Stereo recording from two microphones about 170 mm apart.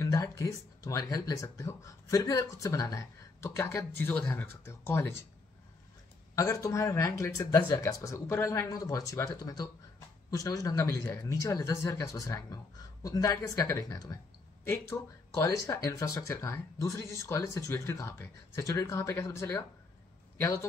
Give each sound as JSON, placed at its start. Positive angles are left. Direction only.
{"t": 0.0, "sound": "speech", "side_deg": 20}
{"t": 6.3, "sound": "speech", "side_deg": 20}